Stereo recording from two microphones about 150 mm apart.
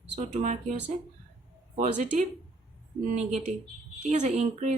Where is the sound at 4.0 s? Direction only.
45° right (ahead or behind).